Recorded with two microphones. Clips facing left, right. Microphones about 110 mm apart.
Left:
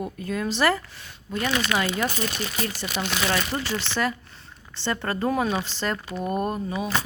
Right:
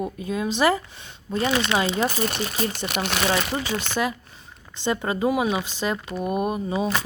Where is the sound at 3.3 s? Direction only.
15° right (ahead or behind).